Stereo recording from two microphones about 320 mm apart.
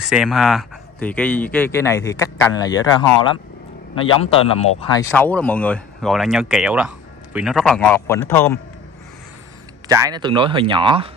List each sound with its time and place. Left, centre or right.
0.0 s a man's voice: centre
5.1 s speech: centre
9.8 s speech: centre